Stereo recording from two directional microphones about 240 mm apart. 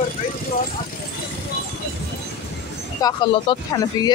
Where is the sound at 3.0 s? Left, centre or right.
Centre.